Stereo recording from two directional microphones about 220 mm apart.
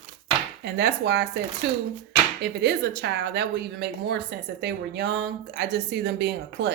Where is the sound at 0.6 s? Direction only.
50° right (ahead or behind).